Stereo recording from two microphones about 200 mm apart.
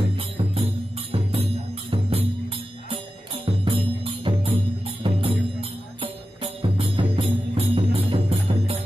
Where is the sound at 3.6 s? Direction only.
25° right (ahead or behind).